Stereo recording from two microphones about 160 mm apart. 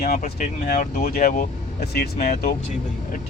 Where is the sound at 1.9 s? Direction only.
75° left (ahead or behind).